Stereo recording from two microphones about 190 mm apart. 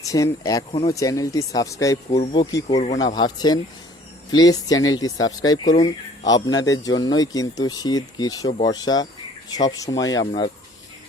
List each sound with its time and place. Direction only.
0.0 s speech: 15° left (ahead or behind)
5.6 s speech: 35° left (ahead or behind)
6.2 s speech: 20° left (ahead or behind)